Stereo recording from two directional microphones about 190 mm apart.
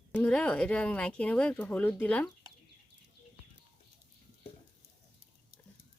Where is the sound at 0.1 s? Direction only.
5° left (ahead or behind).